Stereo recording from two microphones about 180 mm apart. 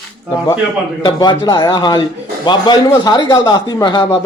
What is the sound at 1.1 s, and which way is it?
A man's voice, 25° left (ahead or behind).